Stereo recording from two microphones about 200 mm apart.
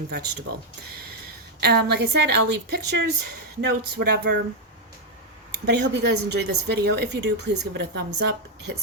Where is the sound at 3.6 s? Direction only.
50° right (ahead or behind).